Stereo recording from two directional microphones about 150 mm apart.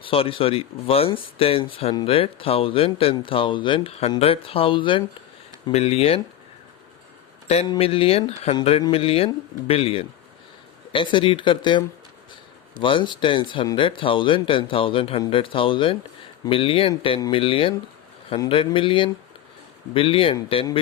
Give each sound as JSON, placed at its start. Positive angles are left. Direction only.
{"t": 0.0, "sound": "speech", "side_deg": 40}
{"t": 7.4, "sound": "speech", "side_deg": 45}
{"t": 12.8, "sound": "speech", "side_deg": 35}